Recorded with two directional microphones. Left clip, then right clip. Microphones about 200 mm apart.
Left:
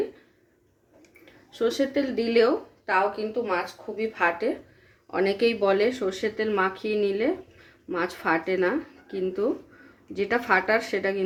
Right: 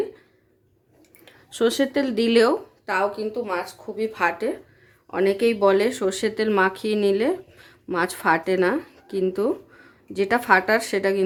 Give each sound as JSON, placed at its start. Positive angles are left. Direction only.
{"t": 1.2, "sound": "speech", "side_deg": -50}